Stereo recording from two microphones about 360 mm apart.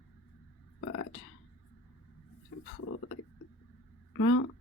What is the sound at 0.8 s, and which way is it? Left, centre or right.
Speech, left.